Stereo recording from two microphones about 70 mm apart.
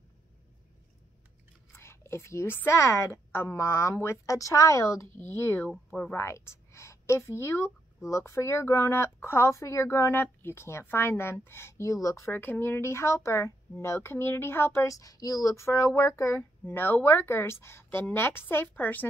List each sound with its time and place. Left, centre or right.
1.7 s a woman's voice: left
5.1 s speech: left
5.7 s speech: centre
6.1 s speech: left
11.9 s speech: left
12.3 s speech: left
14.9 s speech: left
16.6 s speech: left